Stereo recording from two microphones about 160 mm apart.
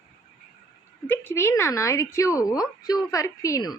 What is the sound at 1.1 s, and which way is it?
Speech, 15° left (ahead or behind).